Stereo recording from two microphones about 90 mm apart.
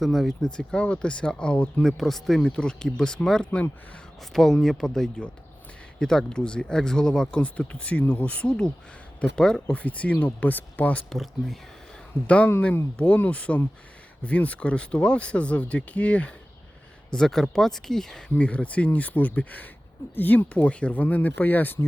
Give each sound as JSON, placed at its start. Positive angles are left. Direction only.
{"t": 0.0, "sound": "speech", "side_deg": 0}
{"t": 11.1, "sound": "speech", "side_deg": 0}
{"t": 12.6, "sound": "speech", "side_deg": 15}
{"t": 18.3, "sound": "speech", "side_deg": 15}